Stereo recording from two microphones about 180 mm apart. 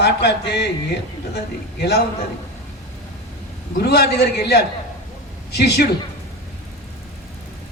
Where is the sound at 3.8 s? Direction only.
60° left (ahead or behind).